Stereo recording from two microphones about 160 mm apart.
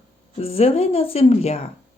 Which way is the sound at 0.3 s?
40° left (ahead or behind).